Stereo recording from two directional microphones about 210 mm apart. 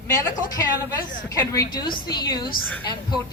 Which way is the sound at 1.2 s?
15° left (ahead or behind).